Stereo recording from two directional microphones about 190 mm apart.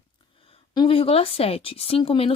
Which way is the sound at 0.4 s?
25° left (ahead or behind).